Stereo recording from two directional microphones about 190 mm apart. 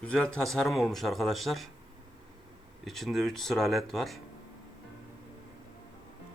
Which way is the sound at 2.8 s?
Centre (ahead or behind).